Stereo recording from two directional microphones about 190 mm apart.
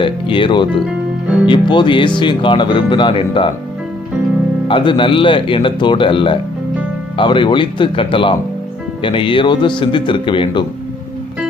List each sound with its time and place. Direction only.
0.0 s speech: 25° left (ahead or behind)
4.7 s speech: 25° left (ahead or behind)